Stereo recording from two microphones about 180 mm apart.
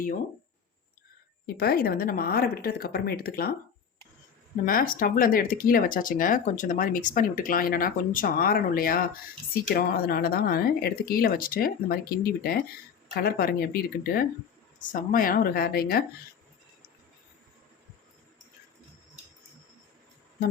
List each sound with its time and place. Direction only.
1.5 s a woman's voice: 60° left (ahead or behind)
4.6 s a woman's voice: 50° left (ahead or behind)